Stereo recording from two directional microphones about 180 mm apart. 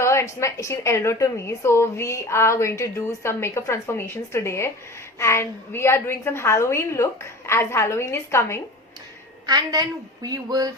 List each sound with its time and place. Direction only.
0.0 s a woman's voice: 15° left (ahead or behind)
9.5 s speech: 20° right (ahead or behind)